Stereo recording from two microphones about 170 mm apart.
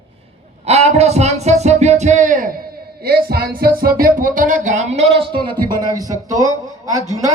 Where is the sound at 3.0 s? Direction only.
65° right (ahead or behind); by 5.3 s 35° right (ahead or behind).